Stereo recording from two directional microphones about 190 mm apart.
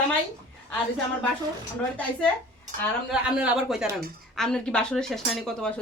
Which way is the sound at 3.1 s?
5° right (ahead or behind).